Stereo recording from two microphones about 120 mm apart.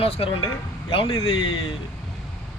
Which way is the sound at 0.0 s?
55° left (ahead or behind).